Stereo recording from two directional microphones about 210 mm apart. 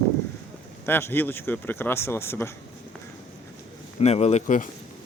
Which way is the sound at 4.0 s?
30° left (ahead or behind).